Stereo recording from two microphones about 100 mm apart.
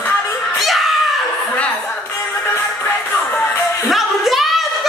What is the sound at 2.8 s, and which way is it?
Music, 20° left (ahead or behind).